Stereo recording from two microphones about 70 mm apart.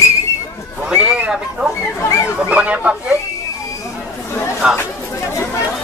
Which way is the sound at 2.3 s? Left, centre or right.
Centre.